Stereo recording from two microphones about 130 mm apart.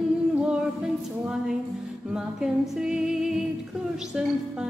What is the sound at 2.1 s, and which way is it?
Music, 5° right (ahead or behind).